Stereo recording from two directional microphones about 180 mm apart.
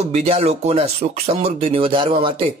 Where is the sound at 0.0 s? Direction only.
35° right (ahead or behind).